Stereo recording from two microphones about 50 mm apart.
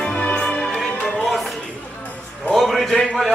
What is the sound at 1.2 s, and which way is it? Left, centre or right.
Music, centre.